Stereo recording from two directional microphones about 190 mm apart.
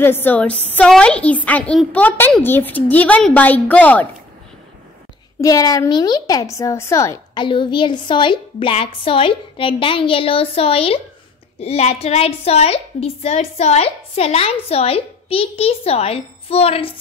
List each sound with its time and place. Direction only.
0.0 s a woman's voice: 10° left (ahead or behind)
5.4 s a woman's voice: 20° left (ahead or behind)